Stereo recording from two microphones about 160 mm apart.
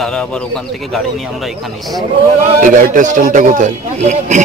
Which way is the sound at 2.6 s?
55° right (ahead or behind).